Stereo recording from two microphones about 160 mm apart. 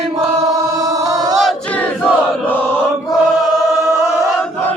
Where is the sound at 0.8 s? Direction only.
25° right (ahead or behind).